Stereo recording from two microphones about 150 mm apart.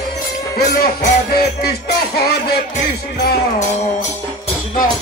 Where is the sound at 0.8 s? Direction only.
90° left.